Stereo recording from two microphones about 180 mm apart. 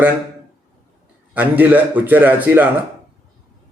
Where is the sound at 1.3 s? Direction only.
10° right (ahead or behind).